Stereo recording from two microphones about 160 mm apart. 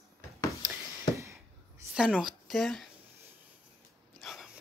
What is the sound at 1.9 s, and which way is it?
Speech, 5° right (ahead or behind).